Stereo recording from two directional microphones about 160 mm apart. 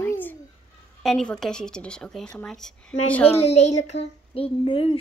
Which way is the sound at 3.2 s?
40° left (ahead or behind).